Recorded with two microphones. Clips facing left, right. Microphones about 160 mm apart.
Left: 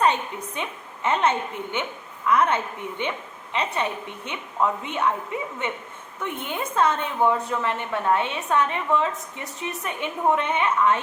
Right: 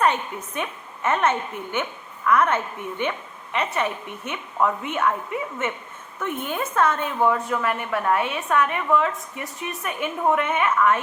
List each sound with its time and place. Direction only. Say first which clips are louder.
0.0 s a woman's voice: even; 20° left (ahead or behind)
6.4 s a woman's voice: even; 20° left (ahead or behind)